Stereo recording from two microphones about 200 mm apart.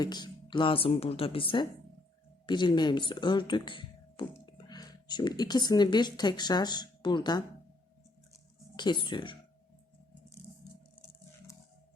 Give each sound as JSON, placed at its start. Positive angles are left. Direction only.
{"t": 0.0, "sound": "speech", "side_deg": 20}
{"t": 8.7, "sound": "speech", "side_deg": 20}